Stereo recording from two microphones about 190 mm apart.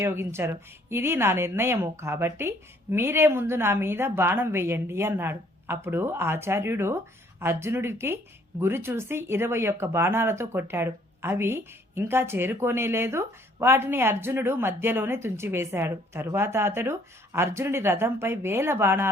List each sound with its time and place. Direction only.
0.0 s a woman's voice: 15° right (ahead or behind)